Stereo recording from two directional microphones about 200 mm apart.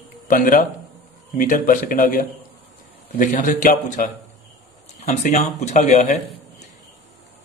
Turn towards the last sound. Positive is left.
turn(degrees=35)  # may be behind; listen again after turning